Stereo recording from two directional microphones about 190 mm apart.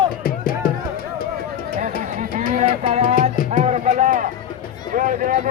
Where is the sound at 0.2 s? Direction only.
50° left (ahead or behind).